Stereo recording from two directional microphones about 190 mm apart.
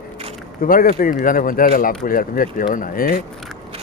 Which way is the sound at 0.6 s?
50° left (ahead or behind).